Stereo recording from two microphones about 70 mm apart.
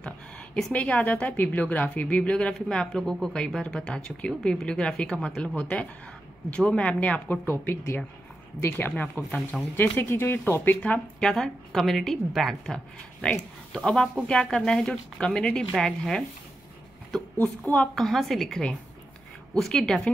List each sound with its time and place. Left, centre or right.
0.7 s speech: left
7.6 s speech: left
10.8 s speech: centre
11.2 s speech: centre
17.9 s a woman's voice: centre